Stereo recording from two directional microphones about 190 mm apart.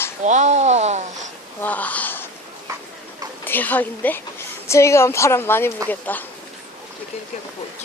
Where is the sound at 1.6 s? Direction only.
10° left (ahead or behind).